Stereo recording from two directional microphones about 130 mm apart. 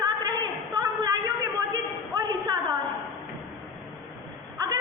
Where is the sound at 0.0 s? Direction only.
30° right (ahead or behind).